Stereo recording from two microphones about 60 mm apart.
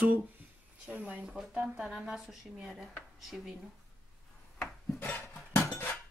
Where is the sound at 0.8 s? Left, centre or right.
Right.